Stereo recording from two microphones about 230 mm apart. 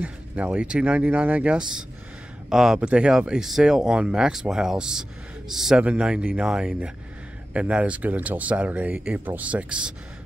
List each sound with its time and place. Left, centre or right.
0.0 s speech: centre